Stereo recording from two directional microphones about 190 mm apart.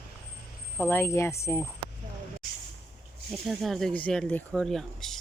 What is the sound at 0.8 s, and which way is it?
Speech, 10° left (ahead or behind).